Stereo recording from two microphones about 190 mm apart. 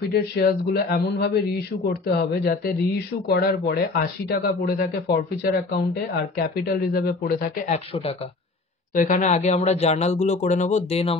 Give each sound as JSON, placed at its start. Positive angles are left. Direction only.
{"t": 0.1, "sound": "speech", "side_deg": 55}
{"t": 8.9, "sound": "speech", "side_deg": 40}